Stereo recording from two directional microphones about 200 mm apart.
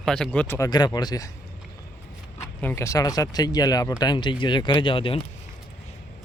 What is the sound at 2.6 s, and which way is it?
Speech, 10° left (ahead or behind).